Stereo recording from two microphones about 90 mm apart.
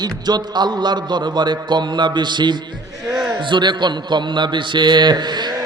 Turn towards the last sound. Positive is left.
turn(degrees=-55)  # may be behind; listen again after turning